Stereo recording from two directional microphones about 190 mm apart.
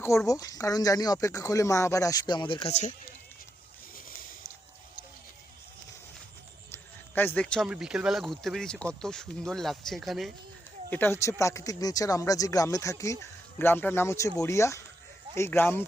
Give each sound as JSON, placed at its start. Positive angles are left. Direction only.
{"t": 0.3, "sound": "speech", "side_deg": 20}
{"t": 6.7, "sound": "a sound", "side_deg": 10}
{"t": 7.7, "sound": "speech", "side_deg": -5}
{"t": 10.8, "sound": "speech", "side_deg": 10}